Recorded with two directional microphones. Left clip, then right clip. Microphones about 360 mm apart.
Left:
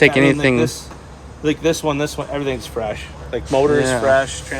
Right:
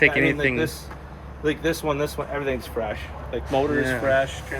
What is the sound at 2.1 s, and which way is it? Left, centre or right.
Speech, left.